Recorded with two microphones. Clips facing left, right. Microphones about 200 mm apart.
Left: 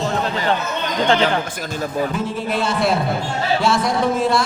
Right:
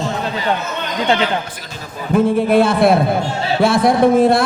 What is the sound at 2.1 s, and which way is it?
A man's voice, 55° right (ahead or behind).